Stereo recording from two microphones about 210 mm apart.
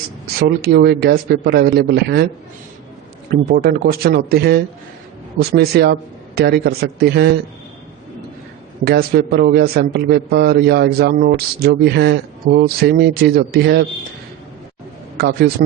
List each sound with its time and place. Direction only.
0.4 s a man's voice: 50° right (ahead or behind)
3.5 s a man's voice: 45° right (ahead or behind)
8.8 s a man's voice: 50° right (ahead or behind)
15.2 s a man's voice: 50° right (ahead or behind)